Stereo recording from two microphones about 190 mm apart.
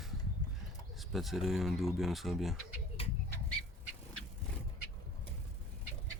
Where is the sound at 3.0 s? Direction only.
30° left (ahead or behind).